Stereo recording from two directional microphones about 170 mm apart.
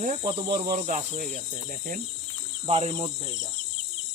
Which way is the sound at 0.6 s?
50° right (ahead or behind).